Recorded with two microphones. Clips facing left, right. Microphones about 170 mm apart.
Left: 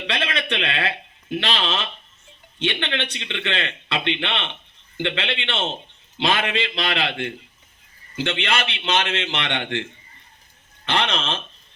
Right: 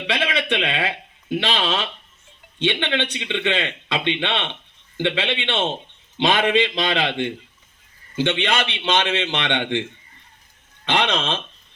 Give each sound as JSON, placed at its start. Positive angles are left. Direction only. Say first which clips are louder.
{"t": 0.1, "sound": "a man's voice", "louder": "right 4 dB", "side_deg": -10}
{"t": 10.8, "sound": "a man's voice", "louder": "right 2 dB", "side_deg": -15}